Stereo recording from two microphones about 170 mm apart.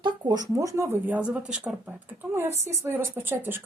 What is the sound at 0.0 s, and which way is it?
A woman's voice, 25° right (ahead or behind).